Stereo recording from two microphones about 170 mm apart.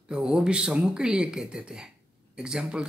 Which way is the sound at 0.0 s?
5° right (ahead or behind).